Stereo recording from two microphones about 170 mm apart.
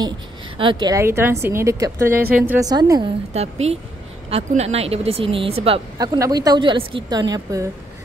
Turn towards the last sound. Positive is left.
turn(degrees=-20)  # may be behind; listen again after turning